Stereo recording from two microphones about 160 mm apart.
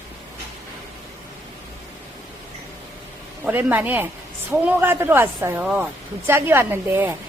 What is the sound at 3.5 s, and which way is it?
A woman's voice, 10° right (ahead or behind).